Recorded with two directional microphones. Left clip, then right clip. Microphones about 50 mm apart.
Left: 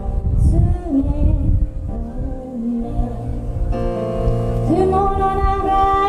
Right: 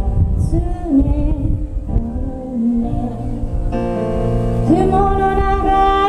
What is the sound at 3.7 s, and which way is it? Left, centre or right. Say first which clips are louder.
Music: right 2 dB; centre.